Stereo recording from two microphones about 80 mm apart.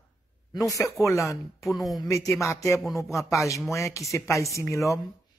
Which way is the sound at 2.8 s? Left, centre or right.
Centre.